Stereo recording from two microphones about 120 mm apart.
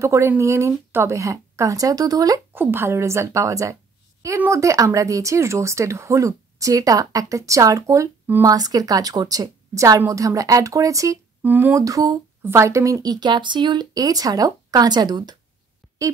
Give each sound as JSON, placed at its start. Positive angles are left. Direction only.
{"t": 0.0, "sound": "speech", "side_deg": -25}
{"t": 2.5, "sound": "speech", "side_deg": -20}
{"t": 11.4, "sound": "speech", "side_deg": -15}
{"t": 11.7, "sound": "speech", "side_deg": -30}